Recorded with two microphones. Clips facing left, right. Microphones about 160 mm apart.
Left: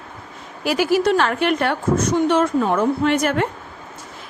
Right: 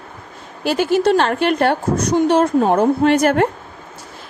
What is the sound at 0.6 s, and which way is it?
Speech, 25° right (ahead or behind).